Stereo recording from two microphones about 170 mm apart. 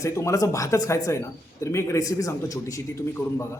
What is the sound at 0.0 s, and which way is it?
A man's voice, 20° left (ahead or behind).